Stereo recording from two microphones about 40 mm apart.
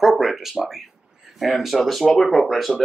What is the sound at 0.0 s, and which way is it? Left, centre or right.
Speech, centre.